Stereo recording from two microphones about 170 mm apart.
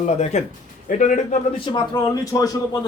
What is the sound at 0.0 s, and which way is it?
A man's voice, 45° left (ahead or behind).